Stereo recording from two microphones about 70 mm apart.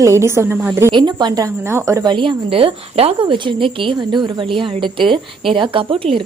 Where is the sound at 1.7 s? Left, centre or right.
Right.